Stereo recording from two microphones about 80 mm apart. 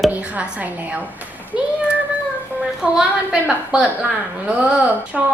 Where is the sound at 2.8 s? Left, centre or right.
Centre.